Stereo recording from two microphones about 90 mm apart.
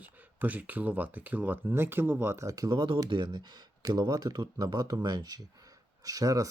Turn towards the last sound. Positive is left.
turn(degrees=-40)  # may be behind; listen again after turning